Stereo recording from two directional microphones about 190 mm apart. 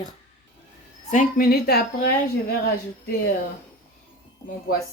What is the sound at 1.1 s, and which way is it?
Speech, 45° left (ahead or behind).